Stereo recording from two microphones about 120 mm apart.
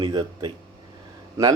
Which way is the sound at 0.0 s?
40° right (ahead or behind).